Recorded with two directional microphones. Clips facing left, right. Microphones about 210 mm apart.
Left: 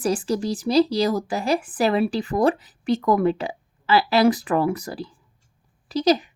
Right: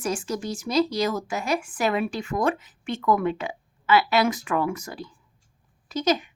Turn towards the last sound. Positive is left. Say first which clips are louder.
# left 4 dB
turn(degrees=35)  # may be behind; listen again after turning